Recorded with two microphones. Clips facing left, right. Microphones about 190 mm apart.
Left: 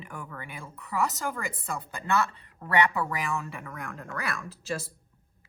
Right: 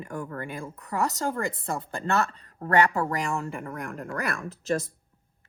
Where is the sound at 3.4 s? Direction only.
50° right (ahead or behind).